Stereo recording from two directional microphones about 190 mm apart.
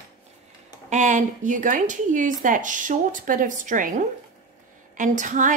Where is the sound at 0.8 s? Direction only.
40° right (ahead or behind).